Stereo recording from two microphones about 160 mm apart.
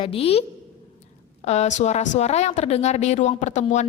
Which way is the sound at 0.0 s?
35° left (ahead or behind).